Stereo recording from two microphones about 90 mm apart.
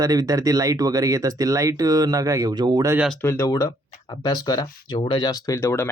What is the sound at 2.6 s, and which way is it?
Speech, 55° right (ahead or behind).